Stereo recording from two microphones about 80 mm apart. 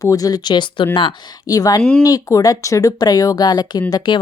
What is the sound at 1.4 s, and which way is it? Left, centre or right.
Speech, left.